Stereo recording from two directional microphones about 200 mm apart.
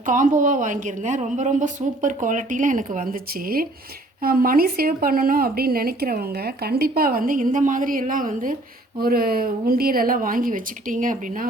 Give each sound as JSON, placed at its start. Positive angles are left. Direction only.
{"t": 0.0, "sound": "a woman's voice", "side_deg": -40}